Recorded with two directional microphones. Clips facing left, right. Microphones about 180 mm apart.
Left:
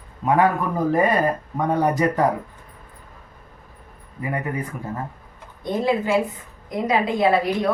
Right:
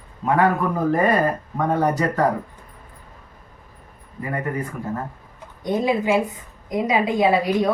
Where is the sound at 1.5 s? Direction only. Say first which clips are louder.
Even; 15° left (ahead or behind).